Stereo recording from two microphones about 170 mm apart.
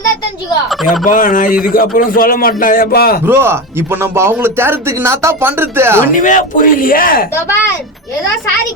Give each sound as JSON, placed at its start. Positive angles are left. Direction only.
{"t": 1.0, "sound": "a man's voice", "side_deg": 50}
{"t": 3.2, "sound": "speech", "side_deg": -15}
{"t": 6.1, "sound": "a man's voice", "side_deg": 50}